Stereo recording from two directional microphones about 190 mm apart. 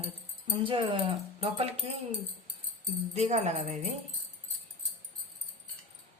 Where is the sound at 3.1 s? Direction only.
35° right (ahead or behind).